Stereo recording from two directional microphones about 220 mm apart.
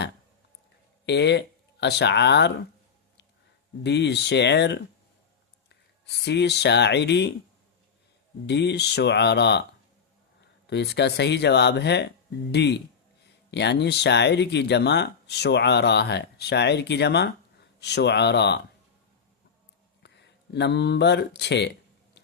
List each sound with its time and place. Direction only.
1.0 s speech: 50° left (ahead or behind)
3.8 s speech: 50° left (ahead or behind)
8.4 s speech: 50° left (ahead or behind)
10.7 s speech: 50° left (ahead or behind)
20.0 s speech: 50° left (ahead or behind)